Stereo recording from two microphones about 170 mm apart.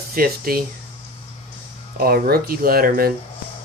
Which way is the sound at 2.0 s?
65° right (ahead or behind).